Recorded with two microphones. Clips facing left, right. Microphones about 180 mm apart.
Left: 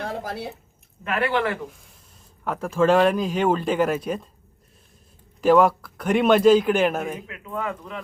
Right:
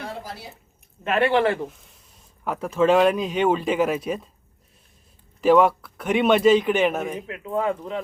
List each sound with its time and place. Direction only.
0.3 s speech: 60° left (ahead or behind)
1.0 s speech: 25° right (ahead or behind)
2.4 s a man's voice: 5° right (ahead or behind)
5.4 s a man's voice: centre (ahead or behind)
7.3 s speech: 30° right (ahead or behind)